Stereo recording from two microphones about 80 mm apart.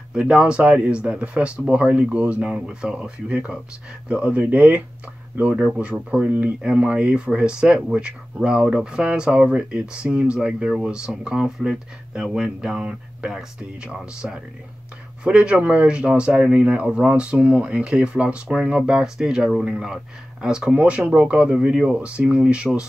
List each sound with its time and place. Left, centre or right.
0.1 s speech: centre
5.6 s speech: centre